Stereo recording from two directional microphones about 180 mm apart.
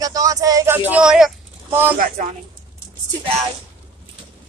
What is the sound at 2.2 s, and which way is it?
Speech, 45° right (ahead or behind).